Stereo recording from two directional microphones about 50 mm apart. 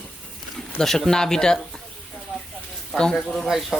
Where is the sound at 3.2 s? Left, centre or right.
Centre.